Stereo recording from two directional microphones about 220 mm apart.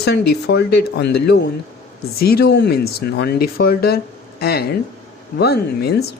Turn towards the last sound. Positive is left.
turn(degrees=45)  # may be behind; listen again after turning